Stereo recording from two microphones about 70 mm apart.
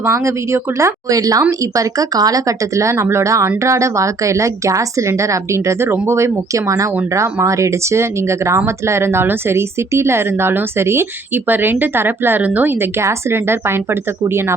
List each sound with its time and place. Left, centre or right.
0.0 s speech: right